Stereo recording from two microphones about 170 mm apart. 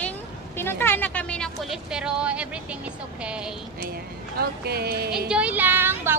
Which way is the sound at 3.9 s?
65° right (ahead or behind).